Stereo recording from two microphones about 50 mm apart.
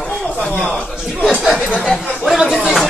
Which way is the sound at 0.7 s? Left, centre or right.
Centre.